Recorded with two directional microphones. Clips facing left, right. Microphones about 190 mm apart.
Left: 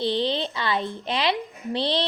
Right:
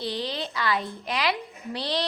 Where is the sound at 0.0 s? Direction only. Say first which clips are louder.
Left 6 dB; 25° left (ahead or behind).